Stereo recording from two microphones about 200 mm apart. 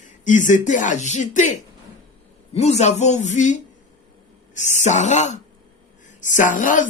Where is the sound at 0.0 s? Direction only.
40° left (ahead or behind).